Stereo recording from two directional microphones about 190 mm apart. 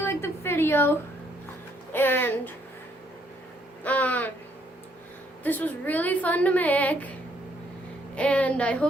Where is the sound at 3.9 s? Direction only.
10° left (ahead or behind).